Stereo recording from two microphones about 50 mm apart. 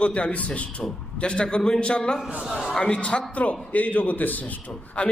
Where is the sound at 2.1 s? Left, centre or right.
Centre.